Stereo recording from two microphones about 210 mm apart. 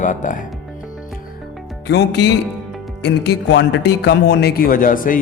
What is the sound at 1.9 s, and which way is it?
Music, 55° left (ahead or behind).